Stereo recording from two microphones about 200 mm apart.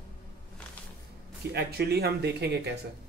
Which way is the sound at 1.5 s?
55° right (ahead or behind).